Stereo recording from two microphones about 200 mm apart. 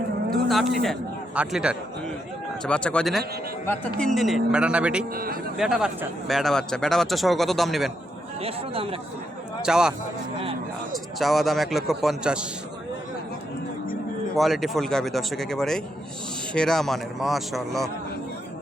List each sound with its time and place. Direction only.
0.3 s a man's voice: centre (ahead or behind)
5.1 s speech: 45° right (ahead or behind)
5.5 s a man's voice: 5° right (ahead or behind)
8.4 s speech: 30° right (ahead or behind)
9.6 s speech: 5° right (ahead or behind)
10.9 s a man's voice: centre (ahead or behind)
14.3 s a man's voice: centre (ahead or behind)